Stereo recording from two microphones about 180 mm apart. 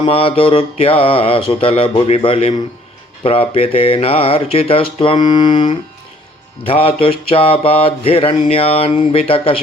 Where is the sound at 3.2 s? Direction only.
30° left (ahead or behind).